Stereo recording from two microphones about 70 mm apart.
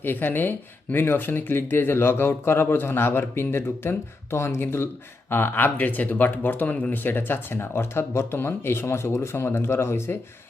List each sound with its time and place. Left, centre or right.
0.0 s speech: left